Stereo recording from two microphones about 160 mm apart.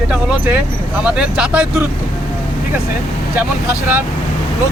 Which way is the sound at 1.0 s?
5° right (ahead or behind).